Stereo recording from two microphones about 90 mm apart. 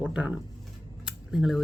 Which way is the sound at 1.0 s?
5° right (ahead or behind).